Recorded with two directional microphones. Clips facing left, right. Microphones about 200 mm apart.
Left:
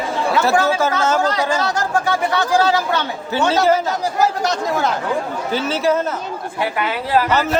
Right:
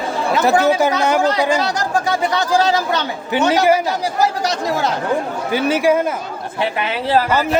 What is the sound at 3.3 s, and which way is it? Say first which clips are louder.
Speech: right 1 dB; 15° right (ahead or behind).